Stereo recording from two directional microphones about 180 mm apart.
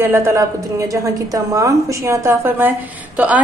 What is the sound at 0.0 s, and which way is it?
Speech, 15° right (ahead or behind).